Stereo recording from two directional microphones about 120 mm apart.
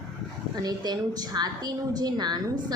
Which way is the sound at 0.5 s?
35° right (ahead or behind).